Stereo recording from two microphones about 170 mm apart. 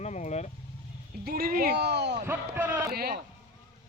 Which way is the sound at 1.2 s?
60° right (ahead or behind).